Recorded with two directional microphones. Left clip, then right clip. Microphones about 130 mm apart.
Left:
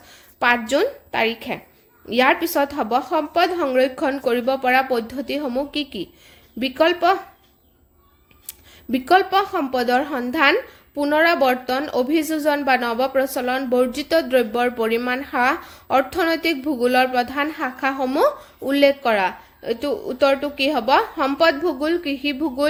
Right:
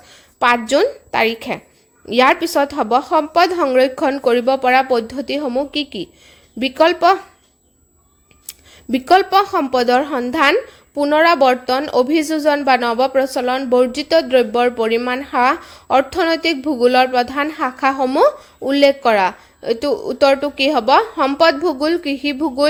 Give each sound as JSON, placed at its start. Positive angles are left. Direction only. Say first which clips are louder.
{"t": 0.1, "sound": "a woman's voice", "louder": "right 4 dB", "side_deg": -40}
{"t": 8.4, "sound": "a woman's voice", "louder": "right 4 dB", "side_deg": -45}